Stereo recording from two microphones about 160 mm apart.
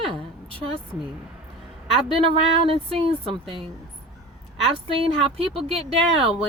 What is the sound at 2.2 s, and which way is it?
Speech, 35° right (ahead or behind).